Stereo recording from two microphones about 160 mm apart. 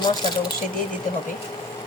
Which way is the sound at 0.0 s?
25° left (ahead or behind).